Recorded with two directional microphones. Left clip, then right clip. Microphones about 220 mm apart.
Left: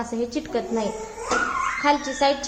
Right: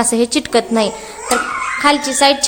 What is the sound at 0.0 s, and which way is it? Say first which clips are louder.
A woman's voice: right 12 dB; 55° right (ahead or behind).